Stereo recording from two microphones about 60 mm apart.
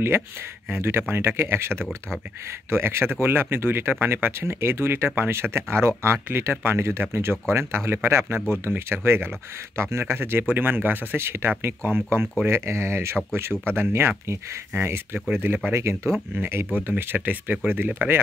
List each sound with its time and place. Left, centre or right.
0.7 s speech: right
15.7 s speech: right
16.9 s speech: right